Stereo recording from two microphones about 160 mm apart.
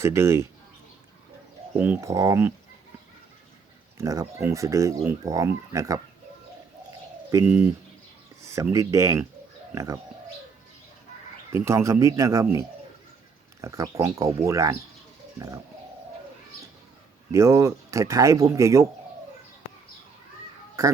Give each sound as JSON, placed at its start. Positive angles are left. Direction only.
{"t": 0.0, "sound": "speech", "side_deg": -15}
{"t": 1.7, "sound": "speech", "side_deg": -15}
{"t": 3.9, "sound": "speech", "side_deg": -20}
{"t": 7.4, "sound": "speech", "side_deg": -10}
{"t": 8.4, "sound": "a sound", "side_deg": -20}
{"t": 8.7, "sound": "speech", "side_deg": -20}
{"t": 11.5, "sound": "speech", "side_deg": -15}
{"t": 13.6, "sound": "speech", "side_deg": -20}
{"t": 17.3, "sound": "speech", "side_deg": -20}
{"t": 20.8, "sound": "speech", "side_deg": -20}